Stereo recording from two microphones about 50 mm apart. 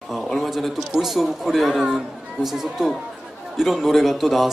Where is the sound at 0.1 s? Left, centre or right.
Centre.